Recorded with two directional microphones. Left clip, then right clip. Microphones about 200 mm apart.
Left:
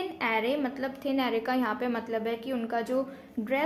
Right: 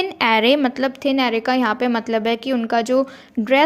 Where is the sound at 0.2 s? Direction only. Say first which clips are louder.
Right 13 dB; 45° right (ahead or behind).